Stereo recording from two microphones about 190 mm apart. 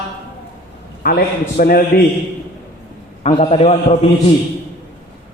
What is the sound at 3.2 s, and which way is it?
Speech, 35° left (ahead or behind).